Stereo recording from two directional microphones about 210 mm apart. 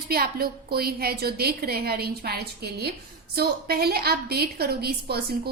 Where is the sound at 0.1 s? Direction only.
45° right (ahead or behind).